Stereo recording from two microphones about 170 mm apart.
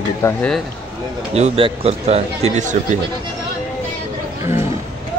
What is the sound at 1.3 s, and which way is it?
Speech, 40° right (ahead or behind).